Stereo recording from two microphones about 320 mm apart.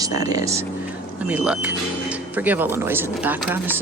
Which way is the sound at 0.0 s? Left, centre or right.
Centre.